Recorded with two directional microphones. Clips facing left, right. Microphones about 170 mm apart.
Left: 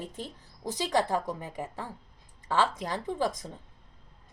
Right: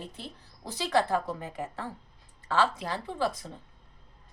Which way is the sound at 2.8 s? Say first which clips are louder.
Left 1 dB; 15° left (ahead or behind).